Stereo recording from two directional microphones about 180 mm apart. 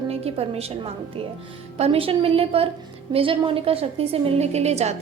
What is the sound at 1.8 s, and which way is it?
A woman's voice, 30° right (ahead or behind).